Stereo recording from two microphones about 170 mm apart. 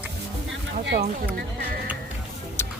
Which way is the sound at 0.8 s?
85° right.